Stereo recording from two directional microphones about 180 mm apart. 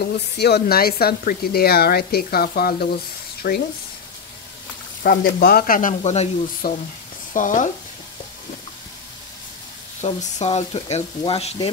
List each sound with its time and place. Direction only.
0.4 s speech: 65° left (ahead or behind)
5.0 s speech: 55° left (ahead or behind)
10.0 s speech: 35° left (ahead or behind)